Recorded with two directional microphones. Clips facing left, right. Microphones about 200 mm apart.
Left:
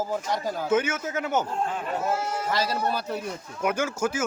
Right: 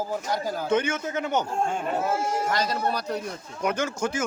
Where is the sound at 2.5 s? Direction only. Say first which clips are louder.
Even; 5° left (ahead or behind).